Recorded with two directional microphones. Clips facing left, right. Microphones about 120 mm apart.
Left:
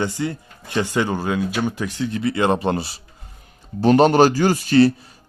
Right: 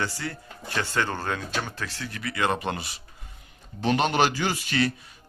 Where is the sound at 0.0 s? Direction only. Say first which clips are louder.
Left 8 dB; 20° left (ahead or behind).